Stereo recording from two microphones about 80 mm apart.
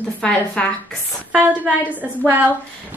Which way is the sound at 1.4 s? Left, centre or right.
Right.